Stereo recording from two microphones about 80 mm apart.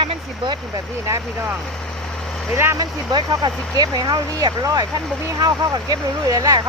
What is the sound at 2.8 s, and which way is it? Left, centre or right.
Speech, right.